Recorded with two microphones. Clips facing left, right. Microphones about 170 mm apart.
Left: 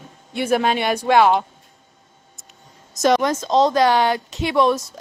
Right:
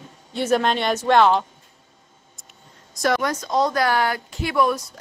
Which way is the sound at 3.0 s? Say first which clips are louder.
Left 5 dB; 20° left (ahead or behind).